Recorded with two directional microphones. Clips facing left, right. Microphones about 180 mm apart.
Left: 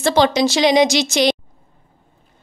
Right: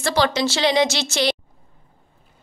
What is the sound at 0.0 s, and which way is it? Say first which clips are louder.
Speech: left 5 dB; 20° left (ahead or behind).